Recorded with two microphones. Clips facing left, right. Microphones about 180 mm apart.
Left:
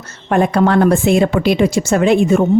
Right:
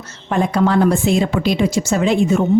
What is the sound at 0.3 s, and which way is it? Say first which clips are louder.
A woman's voice: left 3 dB; 60° left (ahead or behind).